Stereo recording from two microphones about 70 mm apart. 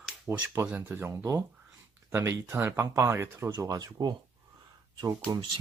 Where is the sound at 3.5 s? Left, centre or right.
Right.